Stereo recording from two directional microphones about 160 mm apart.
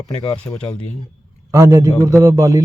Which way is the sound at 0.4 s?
15° left (ahead or behind).